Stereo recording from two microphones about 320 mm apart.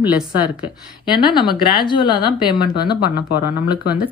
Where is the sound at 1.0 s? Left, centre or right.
Centre.